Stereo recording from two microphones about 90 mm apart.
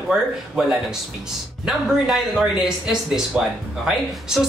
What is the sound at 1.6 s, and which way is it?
Speech, 10° right (ahead or behind).